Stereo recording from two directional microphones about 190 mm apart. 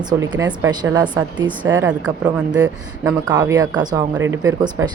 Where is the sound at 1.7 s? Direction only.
10° right (ahead or behind).